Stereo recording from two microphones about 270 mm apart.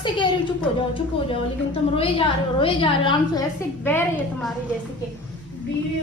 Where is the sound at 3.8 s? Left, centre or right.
Centre.